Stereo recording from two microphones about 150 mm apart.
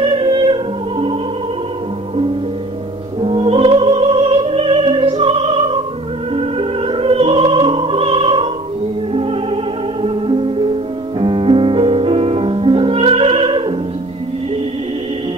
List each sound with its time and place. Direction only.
0.0 s music: 35° right (ahead or behind)
3.2 s music: 35° right (ahead or behind)